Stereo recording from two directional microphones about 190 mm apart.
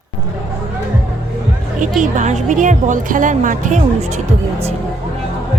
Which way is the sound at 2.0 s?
40° right (ahead or behind).